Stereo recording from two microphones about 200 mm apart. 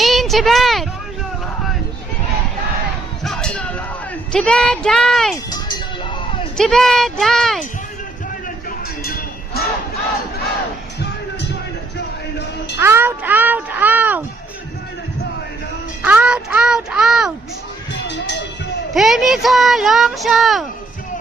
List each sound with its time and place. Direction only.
0.0 s a sound: centre (ahead or behind)
3.2 s music: 5° left (ahead or behind)
4.3 s speech: 5° left (ahead or behind)
5.5 s music: 20° left (ahead or behind)
6.6 s speech: centre (ahead or behind)
9.0 s cowbell: 50° left (ahead or behind)
12.8 s speech: 10° right (ahead or behind)
16.0 s speech: 5° right (ahead or behind)
18.1 s music: 60° left (ahead or behind)
18.9 s speech: centre (ahead or behind)